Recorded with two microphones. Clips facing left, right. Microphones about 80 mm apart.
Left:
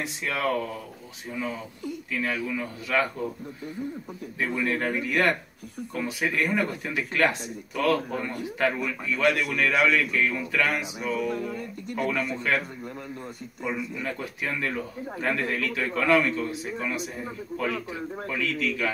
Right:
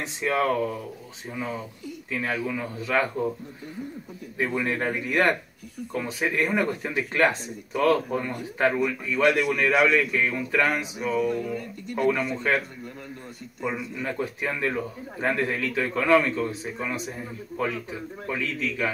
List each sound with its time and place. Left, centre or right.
0.0 s a man's voice: right
2.0 s a man's voice: right
4.4 s a man's voice: right
17.5 s a man's voice: left
18.3 s a man's voice: right